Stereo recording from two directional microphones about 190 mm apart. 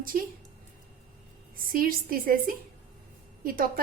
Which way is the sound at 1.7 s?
50° right (ahead or behind).